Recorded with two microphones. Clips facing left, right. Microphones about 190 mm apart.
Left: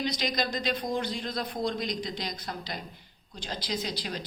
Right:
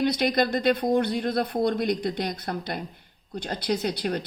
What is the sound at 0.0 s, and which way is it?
Speech, 60° right (ahead or behind).